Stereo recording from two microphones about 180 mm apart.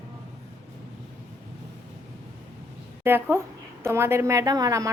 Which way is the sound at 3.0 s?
10° right (ahead or behind).